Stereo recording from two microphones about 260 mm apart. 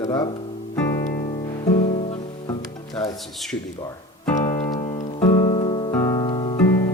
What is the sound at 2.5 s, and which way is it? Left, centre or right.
Music, centre.